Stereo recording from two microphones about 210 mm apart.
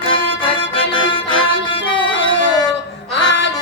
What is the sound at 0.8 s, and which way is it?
Music, 20° left (ahead or behind).